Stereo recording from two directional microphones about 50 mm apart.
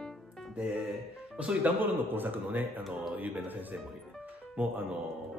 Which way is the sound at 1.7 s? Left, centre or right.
Right.